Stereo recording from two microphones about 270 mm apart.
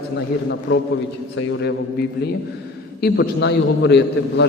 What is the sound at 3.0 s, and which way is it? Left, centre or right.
A man's voice, left.